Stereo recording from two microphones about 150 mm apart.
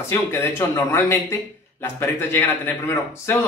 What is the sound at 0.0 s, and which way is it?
Speech, 15° left (ahead or behind).